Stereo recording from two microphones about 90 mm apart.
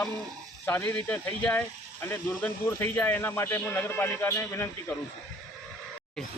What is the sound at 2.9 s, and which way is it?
A man's voice, 20° left (ahead or behind).